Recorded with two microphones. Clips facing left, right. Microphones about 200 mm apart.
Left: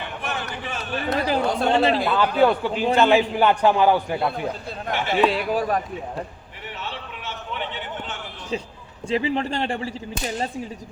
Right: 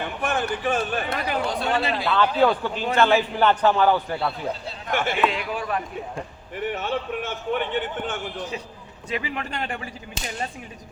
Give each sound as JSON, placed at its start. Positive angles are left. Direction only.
{"t": 0.2, "sound": "speech", "side_deg": -50}
{"t": 1.1, "sound": "speech", "side_deg": 30}
{"t": 2.4, "sound": "a man's voice", "side_deg": 10}
{"t": 4.9, "sound": "speech", "side_deg": -50}
{"t": 5.2, "sound": "speech", "side_deg": 35}
{"t": 6.6, "sound": "a man's voice", "side_deg": -50}
{"t": 9.0, "sound": "speech", "side_deg": 30}